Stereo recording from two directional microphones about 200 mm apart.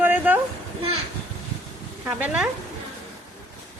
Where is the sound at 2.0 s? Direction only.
5° right (ahead or behind).